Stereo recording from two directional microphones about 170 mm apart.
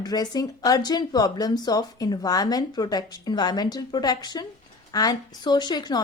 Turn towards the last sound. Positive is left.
turn(degrees=25)  # may be behind; listen again after turning